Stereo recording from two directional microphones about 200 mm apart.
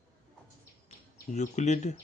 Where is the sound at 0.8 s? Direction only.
35° left (ahead or behind).